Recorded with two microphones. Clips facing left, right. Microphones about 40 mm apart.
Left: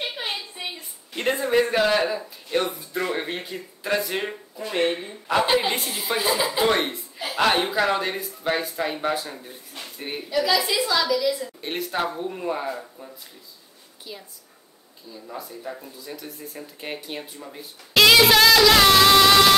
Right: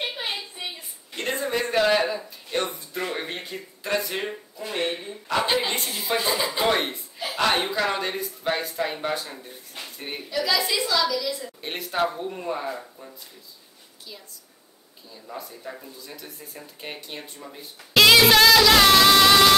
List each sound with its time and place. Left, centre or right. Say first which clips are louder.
0.2 s a sound: left 1 dB; centre
1.3 s a man's voice: left 3 dB; centre
4.7 s speech: left 4 dB; left
5.3 s a woman's voice: left 3 dB; centre
15.2 s a woman's voice: left 2 dB; centre